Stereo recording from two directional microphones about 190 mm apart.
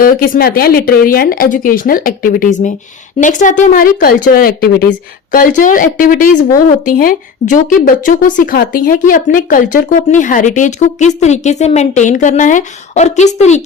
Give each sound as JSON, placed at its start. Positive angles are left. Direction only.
{"t": 0.0, "sound": "a woman's voice", "side_deg": 50}